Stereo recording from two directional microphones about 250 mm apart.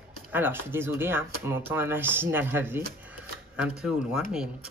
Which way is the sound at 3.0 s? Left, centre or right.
Centre.